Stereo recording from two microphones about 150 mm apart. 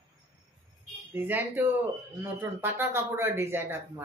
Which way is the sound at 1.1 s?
15° right (ahead or behind).